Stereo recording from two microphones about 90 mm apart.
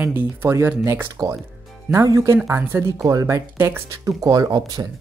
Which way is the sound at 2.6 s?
25° right (ahead or behind).